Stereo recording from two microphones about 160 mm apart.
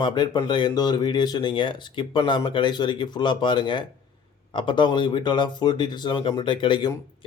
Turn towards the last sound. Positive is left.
turn(degrees=30)  # may be behind; listen again after turning